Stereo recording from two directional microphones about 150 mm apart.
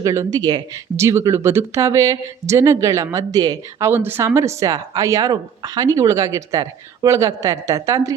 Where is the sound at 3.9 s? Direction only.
15° right (ahead or behind).